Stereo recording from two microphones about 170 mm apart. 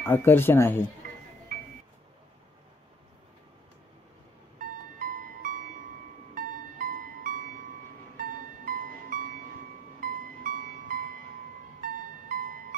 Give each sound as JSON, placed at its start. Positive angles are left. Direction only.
{"t": 0.0, "sound": "speech", "side_deg": 10}
{"t": 4.6, "sound": "music", "side_deg": -55}